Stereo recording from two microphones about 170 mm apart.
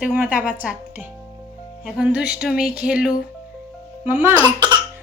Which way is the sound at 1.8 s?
5° right (ahead or behind).